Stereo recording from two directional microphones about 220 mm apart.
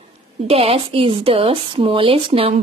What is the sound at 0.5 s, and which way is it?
A woman's voice, 25° right (ahead or behind).